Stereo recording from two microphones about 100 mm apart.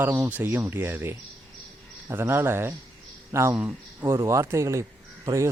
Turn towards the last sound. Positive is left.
turn(degrees=-30)  # may be behind; listen again after turning